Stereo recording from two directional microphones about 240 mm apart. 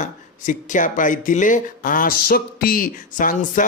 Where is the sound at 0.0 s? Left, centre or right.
Left.